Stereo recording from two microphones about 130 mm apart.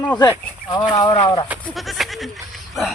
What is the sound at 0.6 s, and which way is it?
Speech, 40° left (ahead or behind).